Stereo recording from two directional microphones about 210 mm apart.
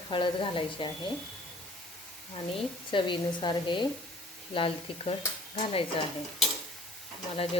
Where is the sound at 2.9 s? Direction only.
25° left (ahead or behind).